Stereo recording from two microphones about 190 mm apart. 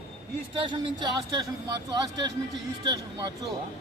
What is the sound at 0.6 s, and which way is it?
Speech, 25° right (ahead or behind).